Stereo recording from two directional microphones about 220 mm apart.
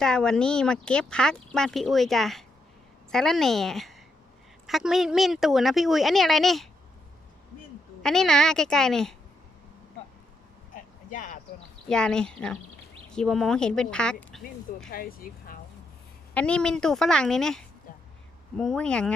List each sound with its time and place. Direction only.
0.0 s speech: 5° left (ahead or behind)
8.0 s speech: centre (ahead or behind)
11.1 s speech: 35° left (ahead or behind)
11.9 s speech: 5° left (ahead or behind)
14.8 s speech: 40° left (ahead or behind)
16.3 s speech: 5° left (ahead or behind)